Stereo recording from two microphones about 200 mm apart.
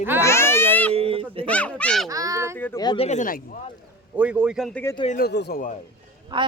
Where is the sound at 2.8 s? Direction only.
20° left (ahead or behind).